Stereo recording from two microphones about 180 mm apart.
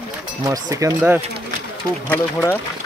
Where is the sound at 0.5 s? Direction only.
15° right (ahead or behind).